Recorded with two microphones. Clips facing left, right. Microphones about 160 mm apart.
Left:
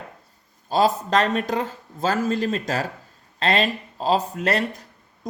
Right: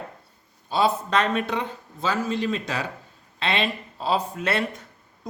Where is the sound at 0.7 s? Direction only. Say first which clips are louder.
Left 3 dB; 45° left (ahead or behind).